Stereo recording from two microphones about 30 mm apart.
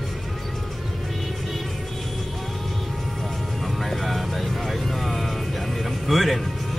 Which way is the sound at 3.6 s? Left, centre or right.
Centre.